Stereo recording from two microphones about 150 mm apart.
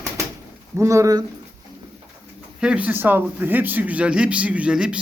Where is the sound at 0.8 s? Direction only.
20° right (ahead or behind).